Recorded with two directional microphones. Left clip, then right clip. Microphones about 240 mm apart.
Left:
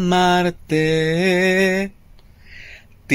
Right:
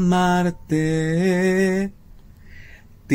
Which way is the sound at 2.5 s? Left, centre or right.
Left.